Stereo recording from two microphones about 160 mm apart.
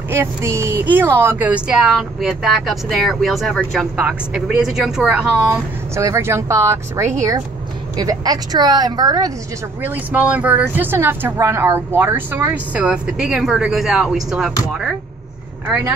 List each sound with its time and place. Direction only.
0.1 s speech: 15° right (ahead or behind)
5.5 s speech: 20° right (ahead or behind)
9.8 s speech: 10° right (ahead or behind)